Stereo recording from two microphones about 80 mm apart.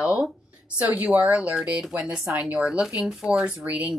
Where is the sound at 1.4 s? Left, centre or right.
Centre.